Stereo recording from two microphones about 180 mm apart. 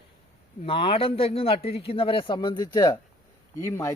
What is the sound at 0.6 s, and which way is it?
A man's voice, 30° left (ahead or behind).